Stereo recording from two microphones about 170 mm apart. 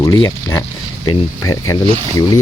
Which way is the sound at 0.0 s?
20° left (ahead or behind).